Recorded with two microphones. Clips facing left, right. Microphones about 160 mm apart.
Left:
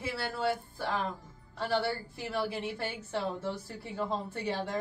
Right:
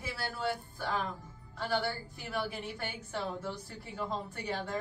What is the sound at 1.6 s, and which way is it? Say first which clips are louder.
A woman's voice: left 3 dB; 30° left (ahead or behind).